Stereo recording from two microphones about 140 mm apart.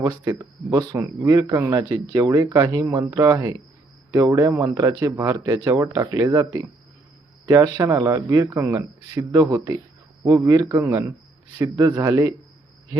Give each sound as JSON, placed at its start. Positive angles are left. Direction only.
{"t": 0.0, "sound": "speech", "side_deg": -30}